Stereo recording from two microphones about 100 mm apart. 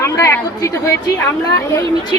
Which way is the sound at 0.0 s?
30° left (ahead or behind).